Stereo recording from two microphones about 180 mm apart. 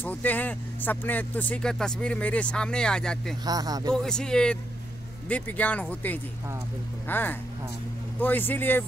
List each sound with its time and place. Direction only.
0.0 s speech: 10° left (ahead or behind)
3.4 s speech: 20° right (ahead or behind)
3.9 s speech: 5° left (ahead or behind)